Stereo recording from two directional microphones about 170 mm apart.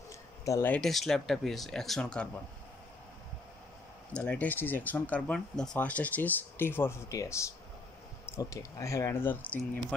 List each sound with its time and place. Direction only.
0.5 s speech: 15° left (ahead or behind)
0.7 s speech: centre (ahead or behind)
4.1 s speech: 10° left (ahead or behind)